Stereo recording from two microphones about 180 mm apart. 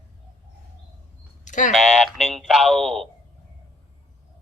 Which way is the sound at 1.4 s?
45° left (ahead or behind).